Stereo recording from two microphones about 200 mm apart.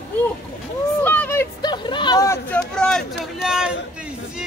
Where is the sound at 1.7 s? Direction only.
25° left (ahead or behind).